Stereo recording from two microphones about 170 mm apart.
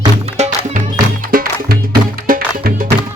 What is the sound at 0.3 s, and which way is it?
Music, 40° right (ahead or behind).